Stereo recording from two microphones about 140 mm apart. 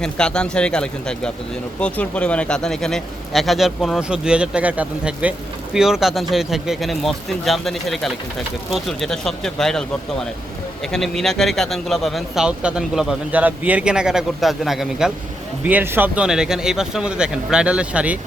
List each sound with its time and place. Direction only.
0.0 s speech: 5° left (ahead or behind)
10.9 s speech: 5° left (ahead or behind)
15.6 s speech: 15° right (ahead or behind)